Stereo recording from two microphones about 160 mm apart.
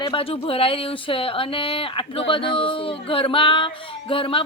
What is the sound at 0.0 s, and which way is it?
A woman's voice, 35° left (ahead or behind).